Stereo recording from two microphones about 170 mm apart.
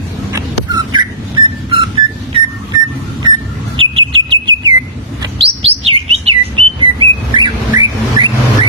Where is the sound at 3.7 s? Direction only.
30° right (ahead or behind).